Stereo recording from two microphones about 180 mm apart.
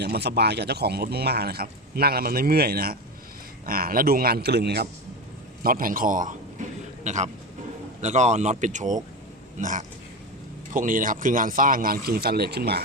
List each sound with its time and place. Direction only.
0.0 s speech: 65° right (ahead or behind)
5.6 s a man's voice: 50° right (ahead or behind)